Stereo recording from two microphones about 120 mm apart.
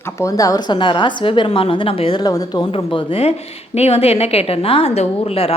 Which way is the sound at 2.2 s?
30° left (ahead or behind).